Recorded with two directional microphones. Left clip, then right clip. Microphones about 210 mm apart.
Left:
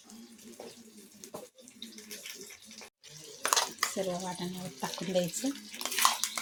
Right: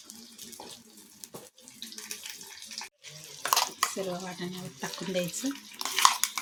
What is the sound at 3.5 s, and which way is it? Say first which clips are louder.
Speech: right 3 dB; 5° right (ahead or behind).